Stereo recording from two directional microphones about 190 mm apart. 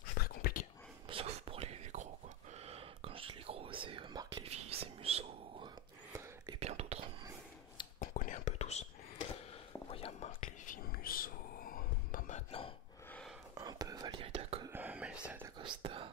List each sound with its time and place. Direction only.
0.2 s whispering: 50° left (ahead or behind)
1.0 s whispering: 30° right (ahead or behind)
8.0 s whispering: 45° left (ahead or behind)
13.6 s whispering: 20° right (ahead or behind)
14.7 s whispering: 10° right (ahead or behind)
15.6 s whispering: 25° right (ahead or behind)